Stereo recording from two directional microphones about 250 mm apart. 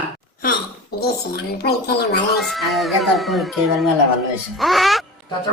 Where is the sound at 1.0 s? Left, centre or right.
Left.